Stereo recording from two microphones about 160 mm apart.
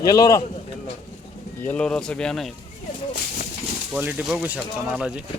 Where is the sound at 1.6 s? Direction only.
5° left (ahead or behind).